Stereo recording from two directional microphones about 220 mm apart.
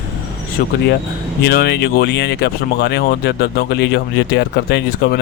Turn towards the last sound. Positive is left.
turn(degrees=50)  # may be behind; listen again after turning